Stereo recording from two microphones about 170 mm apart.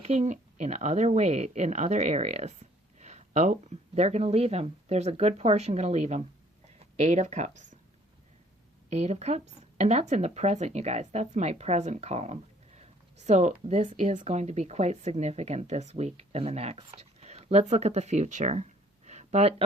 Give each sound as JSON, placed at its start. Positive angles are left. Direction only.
{"t": 0.0, "sound": "a woman's voice", "side_deg": -40}
{"t": 8.9, "sound": "a woman's voice", "side_deg": -40}